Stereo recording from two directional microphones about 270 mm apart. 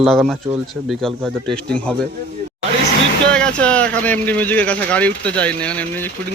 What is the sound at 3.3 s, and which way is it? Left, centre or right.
Speech, centre.